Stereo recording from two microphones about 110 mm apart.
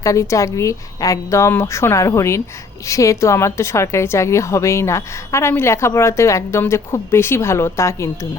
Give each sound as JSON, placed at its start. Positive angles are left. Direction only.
{"t": 0.0, "sound": "a woman's voice", "side_deg": 30}